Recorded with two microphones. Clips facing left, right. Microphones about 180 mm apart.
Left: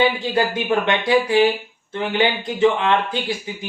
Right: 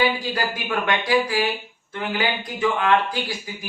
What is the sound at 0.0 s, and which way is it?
Speech, 25° left (ahead or behind).